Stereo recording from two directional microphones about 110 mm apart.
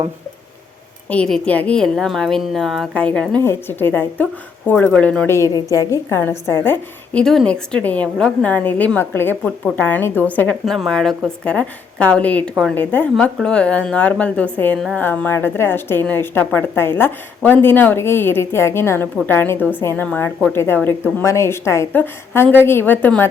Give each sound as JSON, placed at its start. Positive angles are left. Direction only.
{"t": 1.1, "sound": "a woman's voice", "side_deg": 10}
{"t": 2.9, "sound": "a woman's voice", "side_deg": 10}
{"t": 5.5, "sound": "a woman's voice", "side_deg": 35}
{"t": 7.1, "sound": "a woman's voice", "side_deg": 5}
{"t": 10.7, "sound": "a woman's voice", "side_deg": 5}